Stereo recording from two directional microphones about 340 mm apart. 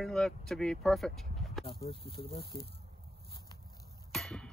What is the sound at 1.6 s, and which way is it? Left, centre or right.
Speech, centre.